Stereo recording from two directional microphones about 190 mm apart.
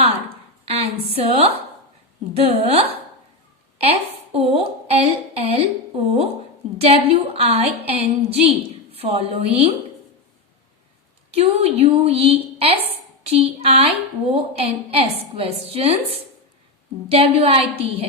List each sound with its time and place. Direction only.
0.7 s a woman's voice: 30° right (ahead or behind)
6.7 s a woman's voice: 30° right (ahead or behind)
11.3 s a woman's voice: 35° right (ahead or behind)